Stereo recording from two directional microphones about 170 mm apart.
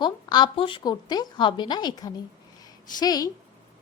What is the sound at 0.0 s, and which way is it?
A woman's voice, 25° left (ahead or behind).